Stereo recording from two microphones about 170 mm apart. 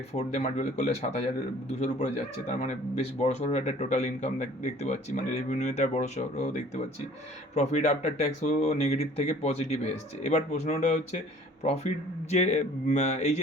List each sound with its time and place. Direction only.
0.1 s speech: 40° left (ahead or behind)